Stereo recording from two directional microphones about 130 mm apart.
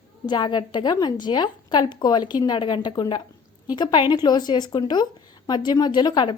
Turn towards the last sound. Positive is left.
turn(degrees=35)  # may be behind; listen again after turning